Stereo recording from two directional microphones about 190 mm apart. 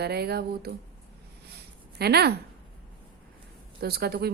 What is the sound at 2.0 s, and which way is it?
Speech, 55° right (ahead or behind).